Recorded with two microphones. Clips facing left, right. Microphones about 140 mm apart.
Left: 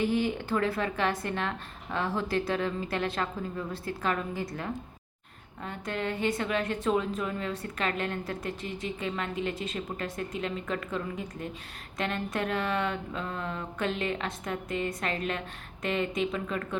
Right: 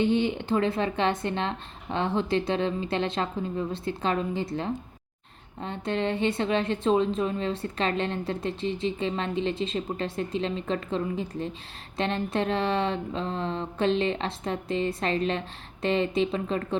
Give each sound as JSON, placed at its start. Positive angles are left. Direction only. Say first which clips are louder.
{"t": 0.0, "sound": "a woman's voice", "louder": "right 3 dB", "side_deg": -25}